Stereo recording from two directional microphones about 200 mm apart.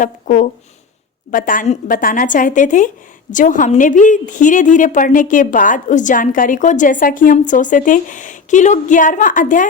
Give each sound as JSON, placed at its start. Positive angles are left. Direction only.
{"t": 0.0, "sound": "a woman's voice", "side_deg": 40}